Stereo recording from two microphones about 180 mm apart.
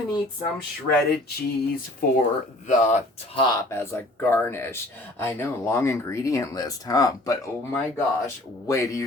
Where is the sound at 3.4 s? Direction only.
15° left (ahead or behind).